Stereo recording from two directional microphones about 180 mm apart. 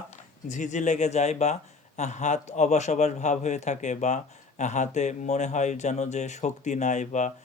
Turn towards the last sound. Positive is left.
turn(degrees=40)  # may be behind; listen again after turning